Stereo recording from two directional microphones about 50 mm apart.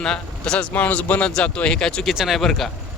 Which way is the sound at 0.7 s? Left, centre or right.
Left.